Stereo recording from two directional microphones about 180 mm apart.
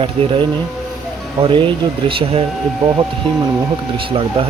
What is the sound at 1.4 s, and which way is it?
Speech, 25° right (ahead or behind).